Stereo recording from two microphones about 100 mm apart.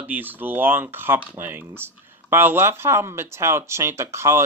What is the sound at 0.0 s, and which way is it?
Speech, 20° right (ahead or behind).